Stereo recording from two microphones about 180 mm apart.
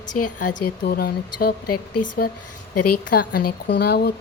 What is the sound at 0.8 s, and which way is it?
Speech, 60° left (ahead or behind).